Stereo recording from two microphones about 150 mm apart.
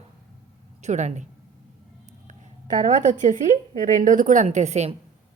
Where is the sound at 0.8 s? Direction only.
50° right (ahead or behind).